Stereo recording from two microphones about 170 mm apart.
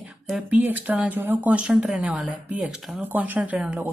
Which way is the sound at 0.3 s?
10° right (ahead or behind).